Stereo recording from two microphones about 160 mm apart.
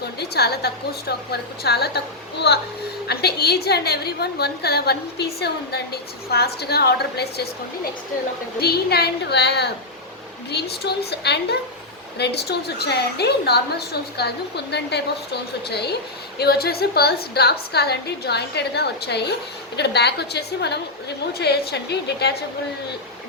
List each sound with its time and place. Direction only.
0.2 s a woman's voice: 90° left
3.1 s a woman's voice: 85° left
8.6 s a woman's voice: 85° left
16.4 s a woman's voice: 80° left